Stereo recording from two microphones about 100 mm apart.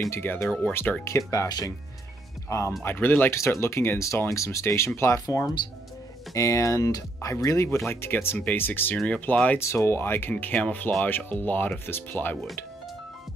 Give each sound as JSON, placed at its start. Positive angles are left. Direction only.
{"t": 0.1, "sound": "speech", "side_deg": 20}
{"t": 0.5, "sound": "speech", "side_deg": 10}
{"t": 0.7, "sound": "speech", "side_deg": 20}
{"t": 2.8, "sound": "speech", "side_deg": 20}
{"t": 9.6, "sound": "speech", "side_deg": 25}